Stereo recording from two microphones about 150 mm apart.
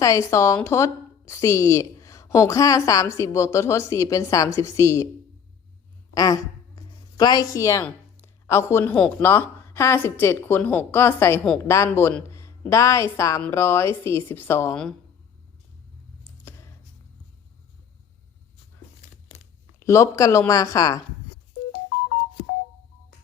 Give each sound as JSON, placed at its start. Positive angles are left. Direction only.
{"t": 0.0, "sound": "a woman's voice", "side_deg": 20}
{"t": 6.1, "sound": "a woman's voice", "side_deg": 25}
{"t": 16.2, "sound": "a sound", "side_deg": 15}
{"t": 19.8, "sound": "a woman's voice", "side_deg": 20}